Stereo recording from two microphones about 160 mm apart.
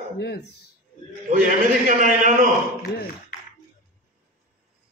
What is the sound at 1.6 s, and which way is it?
Speech, 55° right (ahead or behind).